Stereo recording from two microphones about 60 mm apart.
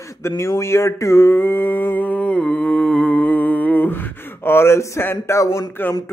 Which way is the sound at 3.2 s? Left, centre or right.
Left.